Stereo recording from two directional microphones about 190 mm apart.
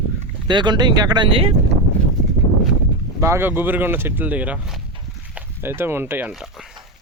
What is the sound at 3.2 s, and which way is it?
Speech, 15° right (ahead or behind).